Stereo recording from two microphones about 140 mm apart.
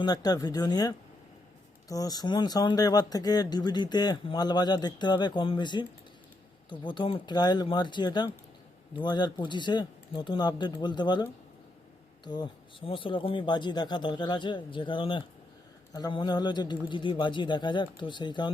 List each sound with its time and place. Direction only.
0.0 s speech: 30° left (ahead or behind)